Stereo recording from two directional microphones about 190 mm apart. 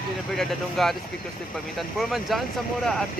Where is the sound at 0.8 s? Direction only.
Centre (ahead or behind).